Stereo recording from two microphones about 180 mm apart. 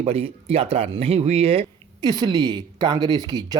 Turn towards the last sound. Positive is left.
turn(degrees=-20)  # may be behind; listen again after turning